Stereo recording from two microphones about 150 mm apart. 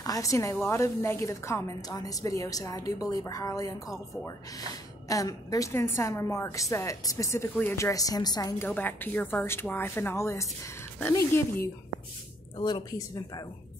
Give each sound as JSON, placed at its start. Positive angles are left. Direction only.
{"t": 0.0, "sound": "speech", "side_deg": 20}
{"t": 8.6, "sound": "a woman's voice", "side_deg": 10}
{"t": 12.5, "sound": "speech", "side_deg": 30}